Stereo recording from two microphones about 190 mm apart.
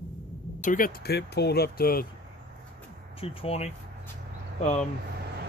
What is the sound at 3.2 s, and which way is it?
Speech, 30° left (ahead or behind).